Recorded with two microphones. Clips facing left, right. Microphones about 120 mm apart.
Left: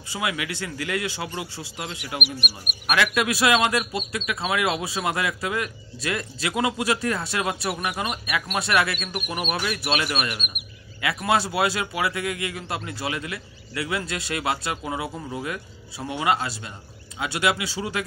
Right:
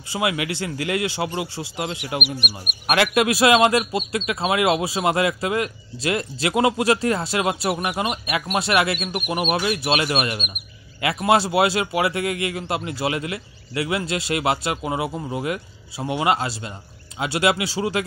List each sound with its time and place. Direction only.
0.1 s a man's voice: 25° right (ahead or behind)
3.3 s a man's voice: 30° right (ahead or behind)
9.2 s speech: 10° right (ahead or behind)
9.6 s a man's voice: 30° right (ahead or behind)